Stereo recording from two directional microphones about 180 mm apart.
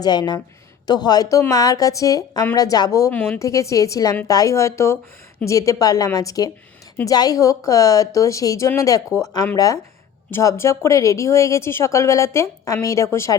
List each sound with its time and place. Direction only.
0.0 s a woman's voice: 25° left (ahead or behind)
10.3 s a woman's voice: 15° left (ahead or behind)